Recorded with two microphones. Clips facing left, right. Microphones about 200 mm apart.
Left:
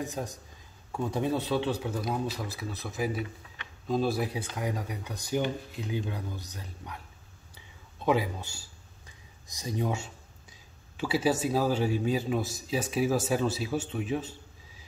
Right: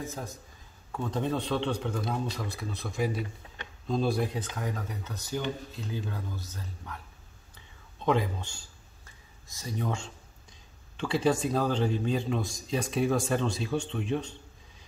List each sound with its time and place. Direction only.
0.0 s speech: 15° left (ahead or behind)
8.0 s whispering: 5° left (ahead or behind)
11.0 s speech: 5° left (ahead or behind)